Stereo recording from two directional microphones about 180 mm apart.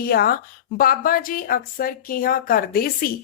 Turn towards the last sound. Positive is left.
turn(degrees=55)  # may be behind; listen again after turning